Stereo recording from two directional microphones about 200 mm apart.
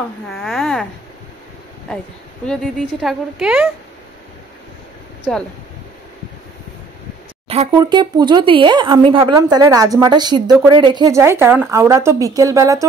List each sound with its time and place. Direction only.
0.3 s a woman's voice: centre (ahead or behind)
2.4 s a woman's voice: 5° left (ahead or behind)
5.3 s a woman's voice: centre (ahead or behind)
7.4 s a sound: 30° right (ahead or behind)
7.7 s a woman's voice: 20° right (ahead or behind)